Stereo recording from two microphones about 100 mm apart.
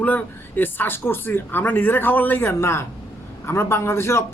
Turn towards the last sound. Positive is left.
turn(degrees=25)  # may be behind; listen again after turning